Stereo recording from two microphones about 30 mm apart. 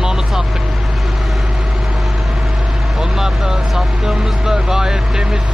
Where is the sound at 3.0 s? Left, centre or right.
Centre.